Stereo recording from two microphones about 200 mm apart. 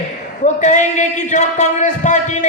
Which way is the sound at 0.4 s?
40° left (ahead or behind).